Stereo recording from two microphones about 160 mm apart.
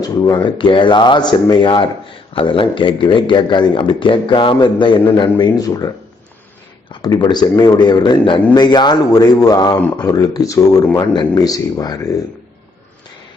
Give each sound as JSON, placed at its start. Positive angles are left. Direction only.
{"t": 0.0, "sound": "speech", "side_deg": 30}
{"t": 6.9, "sound": "speech", "side_deg": 30}